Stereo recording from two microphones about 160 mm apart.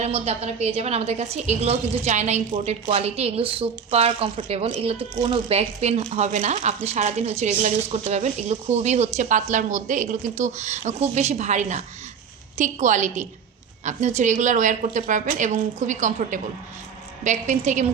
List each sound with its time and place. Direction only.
0.0 s a woman's voice: 40° right (ahead or behind)